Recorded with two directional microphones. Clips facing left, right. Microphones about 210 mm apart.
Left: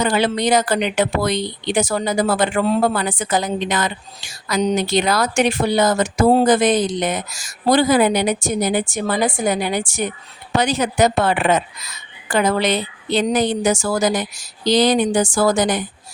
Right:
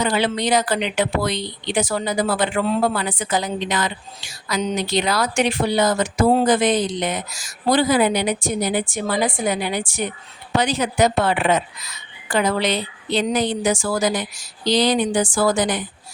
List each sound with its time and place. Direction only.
0.0 s speech: 45° left (ahead or behind)